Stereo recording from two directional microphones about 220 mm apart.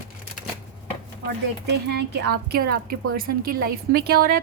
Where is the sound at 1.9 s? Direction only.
50° right (ahead or behind).